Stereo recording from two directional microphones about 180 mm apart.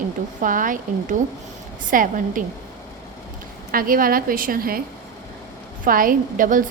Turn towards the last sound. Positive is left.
turn(degrees=-50)  # may be behind; listen again after turning